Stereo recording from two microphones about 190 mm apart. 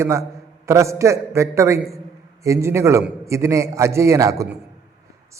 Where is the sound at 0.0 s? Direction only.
15° right (ahead or behind).